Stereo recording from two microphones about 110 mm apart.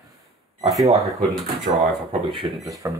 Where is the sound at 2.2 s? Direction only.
50° right (ahead or behind).